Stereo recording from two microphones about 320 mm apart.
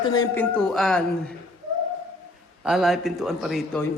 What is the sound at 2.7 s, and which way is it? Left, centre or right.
A man's voice, centre.